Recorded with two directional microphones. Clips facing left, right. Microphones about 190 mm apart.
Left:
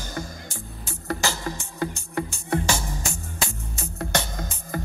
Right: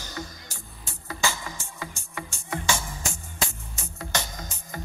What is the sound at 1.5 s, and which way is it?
Music, 55° left (ahead or behind).